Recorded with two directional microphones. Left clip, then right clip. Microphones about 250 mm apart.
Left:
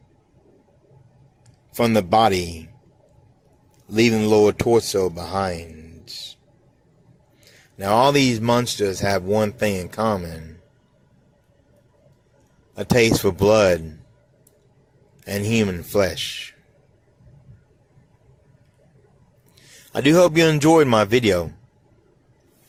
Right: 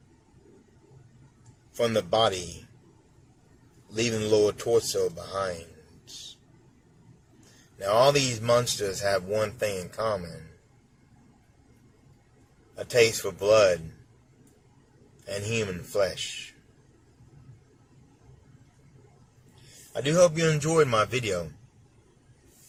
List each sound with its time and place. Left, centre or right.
1.8 s speech: left
3.9 s speech: left
7.8 s speech: left
12.7 s speech: left
15.4 s speech: left
19.9 s speech: left